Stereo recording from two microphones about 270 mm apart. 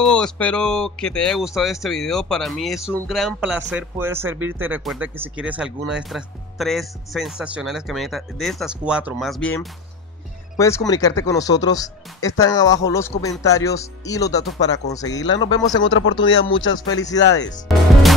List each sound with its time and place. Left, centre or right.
0.0 s speech: centre
15.8 s speech: left
17.0 s speech: centre